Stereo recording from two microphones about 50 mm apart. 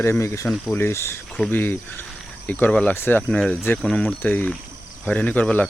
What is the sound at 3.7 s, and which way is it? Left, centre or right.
Speech, left.